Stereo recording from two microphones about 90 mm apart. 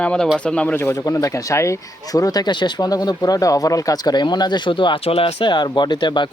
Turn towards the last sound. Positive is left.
turn(degrees=60)  # may be behind; listen again after turning